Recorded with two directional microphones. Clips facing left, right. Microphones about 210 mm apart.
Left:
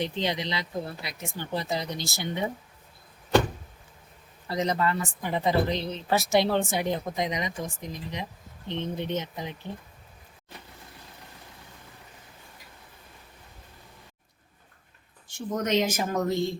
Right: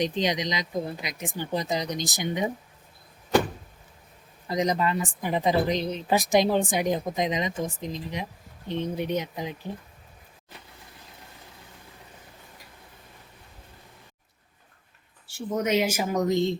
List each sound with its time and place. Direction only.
0.0 s a woman's voice: 15° right (ahead or behind)
4.4 s a woman's voice: 15° right (ahead or behind)
15.3 s a woman's voice: 10° right (ahead or behind)